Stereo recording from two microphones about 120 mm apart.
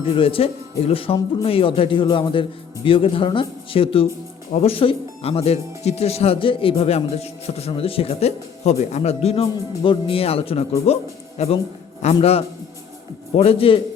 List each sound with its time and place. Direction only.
0.0 s a man's voice: 50° left (ahead or behind)